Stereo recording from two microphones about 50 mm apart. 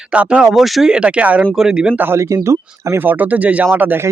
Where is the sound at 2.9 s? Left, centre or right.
Right.